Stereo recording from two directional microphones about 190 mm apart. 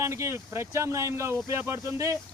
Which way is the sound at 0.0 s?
15° right (ahead or behind).